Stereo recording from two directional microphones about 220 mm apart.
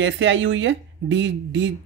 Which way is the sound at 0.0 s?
55° right (ahead or behind).